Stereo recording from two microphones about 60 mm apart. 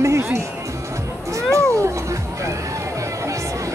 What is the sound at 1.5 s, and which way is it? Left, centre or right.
Cat, right.